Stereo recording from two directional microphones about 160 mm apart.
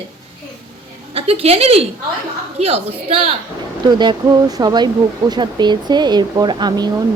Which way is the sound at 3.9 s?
25° right (ahead or behind).